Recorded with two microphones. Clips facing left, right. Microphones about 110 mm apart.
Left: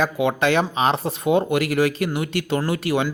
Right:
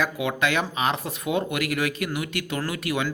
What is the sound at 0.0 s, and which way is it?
Speech, 30° left (ahead or behind).